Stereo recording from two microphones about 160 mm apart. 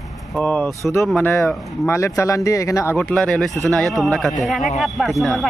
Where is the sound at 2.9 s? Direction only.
10° left (ahead or behind).